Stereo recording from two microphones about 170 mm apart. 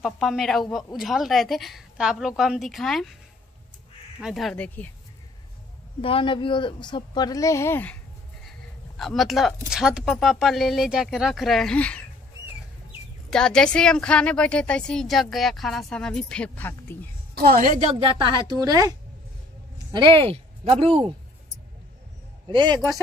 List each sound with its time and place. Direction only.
0.0 s a woman's voice: centre (ahead or behind)
4.2 s a woman's voice: centre (ahead or behind)
5.9 s a woman's voice: 30° left (ahead or behind); by 8.0 s 10° left (ahead or behind)
8.9 s a woman's voice: centre (ahead or behind)
13.3 s a woman's voice: 5° left (ahead or behind)
17.4 s a woman's voice: 60° right (ahead or behind)
17.9 s speech: 30° right (ahead or behind)
22.5 s speech: 25° right (ahead or behind)